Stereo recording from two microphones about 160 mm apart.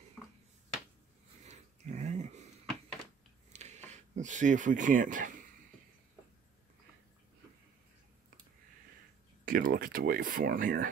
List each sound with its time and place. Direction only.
1.4 s pig: 45° right (ahead or behind)
3.5 s a sound: 45° right (ahead or behind)
9.4 s speech: 60° right (ahead or behind)